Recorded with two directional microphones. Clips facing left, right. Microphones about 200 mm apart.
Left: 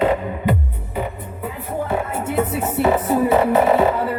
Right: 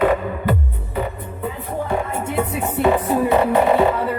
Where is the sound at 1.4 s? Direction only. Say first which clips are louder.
Even; 5° left (ahead or behind).